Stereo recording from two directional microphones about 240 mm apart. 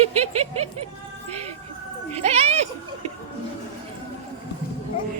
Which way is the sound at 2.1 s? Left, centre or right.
Right.